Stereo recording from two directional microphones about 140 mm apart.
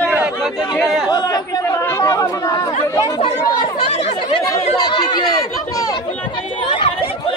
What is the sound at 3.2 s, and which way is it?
Speech, 40° left (ahead or behind).